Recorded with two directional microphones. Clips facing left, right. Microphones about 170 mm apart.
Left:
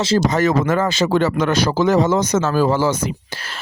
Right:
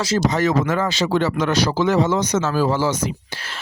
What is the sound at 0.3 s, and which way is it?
A man's voice, 50° left (ahead or behind).